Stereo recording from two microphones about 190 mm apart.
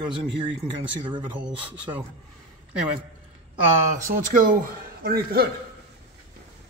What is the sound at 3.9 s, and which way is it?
A man's voice, 45° right (ahead or behind).